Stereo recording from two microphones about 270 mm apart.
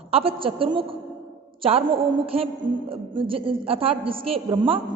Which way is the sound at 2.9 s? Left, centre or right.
Centre.